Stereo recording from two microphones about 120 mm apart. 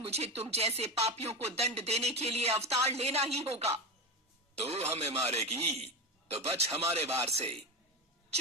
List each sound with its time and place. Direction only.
0.1 s speech: 60° right (ahead or behind)